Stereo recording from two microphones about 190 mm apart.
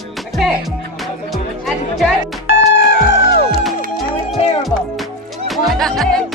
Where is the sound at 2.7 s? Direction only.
65° left (ahead or behind).